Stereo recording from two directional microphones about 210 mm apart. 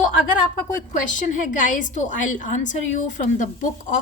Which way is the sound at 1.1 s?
40° left (ahead or behind).